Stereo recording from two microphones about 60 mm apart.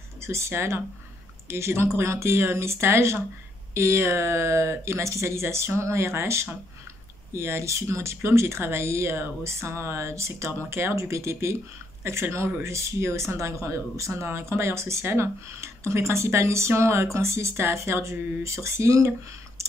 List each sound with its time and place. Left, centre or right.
0.2 s speech: right